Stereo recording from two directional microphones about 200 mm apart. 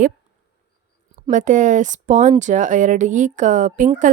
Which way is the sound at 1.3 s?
40° right (ahead or behind).